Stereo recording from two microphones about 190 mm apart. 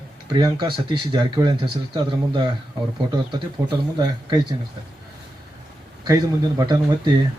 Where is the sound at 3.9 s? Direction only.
20° right (ahead or behind).